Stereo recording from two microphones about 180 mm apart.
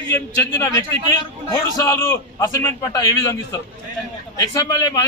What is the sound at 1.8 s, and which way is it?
A man's voice, 20° left (ahead or behind).